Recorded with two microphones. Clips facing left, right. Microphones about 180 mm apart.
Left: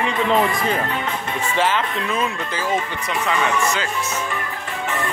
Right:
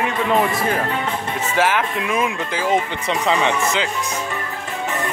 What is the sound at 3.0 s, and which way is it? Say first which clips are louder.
Speech: right 2 dB; 30° right (ahead or behind).